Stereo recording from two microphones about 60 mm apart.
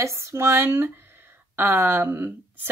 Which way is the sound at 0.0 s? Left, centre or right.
Right.